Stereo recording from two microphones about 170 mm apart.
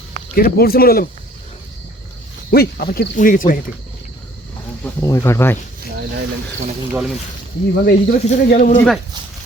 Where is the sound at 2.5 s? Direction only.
60° left (ahead or behind).